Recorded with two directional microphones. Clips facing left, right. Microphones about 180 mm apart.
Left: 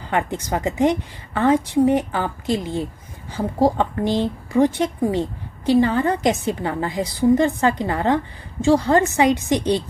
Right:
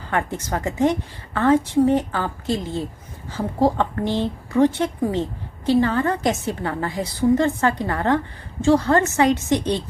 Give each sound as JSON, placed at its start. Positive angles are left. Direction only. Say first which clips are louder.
{"t": 0.1, "sound": "speech", "louder": "left 2 dB", "side_deg": 15}